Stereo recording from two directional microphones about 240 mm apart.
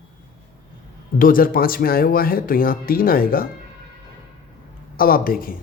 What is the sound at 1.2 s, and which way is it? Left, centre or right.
Speech, left.